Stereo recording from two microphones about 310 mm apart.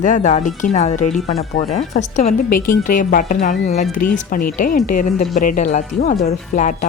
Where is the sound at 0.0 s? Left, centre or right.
Left.